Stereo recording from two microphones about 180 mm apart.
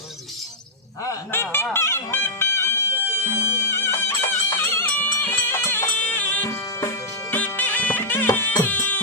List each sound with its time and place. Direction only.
1.0 s honk: 15° left (ahead or behind)
1.7 s music: 15° left (ahead or behind)